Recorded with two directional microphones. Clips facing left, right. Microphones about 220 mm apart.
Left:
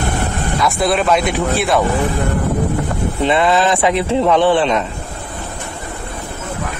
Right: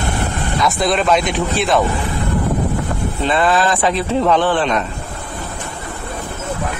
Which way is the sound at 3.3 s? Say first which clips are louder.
Left 1 dB; 20° left (ahead or behind).